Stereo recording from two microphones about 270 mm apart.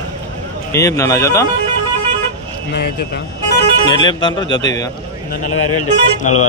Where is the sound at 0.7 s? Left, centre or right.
Centre.